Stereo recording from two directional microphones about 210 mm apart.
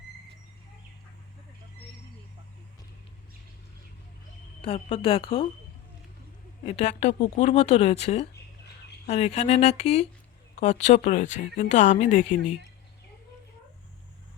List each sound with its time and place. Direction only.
4.6 s speech: 25° left (ahead or behind)
6.7 s speech: 30° left (ahead or behind)